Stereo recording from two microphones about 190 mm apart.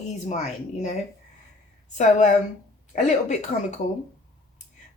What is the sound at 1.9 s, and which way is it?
Speech, 40° left (ahead or behind).